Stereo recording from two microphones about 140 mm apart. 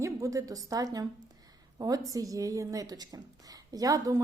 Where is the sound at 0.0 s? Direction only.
20° right (ahead or behind).